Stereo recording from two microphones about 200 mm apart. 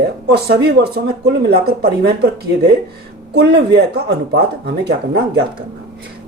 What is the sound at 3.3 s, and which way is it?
Speech, 55° right (ahead or behind).